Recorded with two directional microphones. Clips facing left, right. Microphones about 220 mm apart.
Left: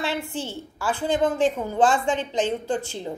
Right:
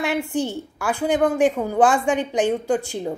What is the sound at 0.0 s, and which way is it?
Speech, 15° right (ahead or behind).